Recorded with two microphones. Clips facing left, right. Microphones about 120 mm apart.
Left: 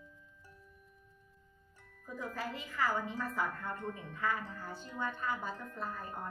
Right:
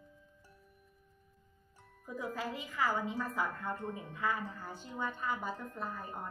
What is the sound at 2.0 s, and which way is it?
A woman's voice, 15° right (ahead or behind).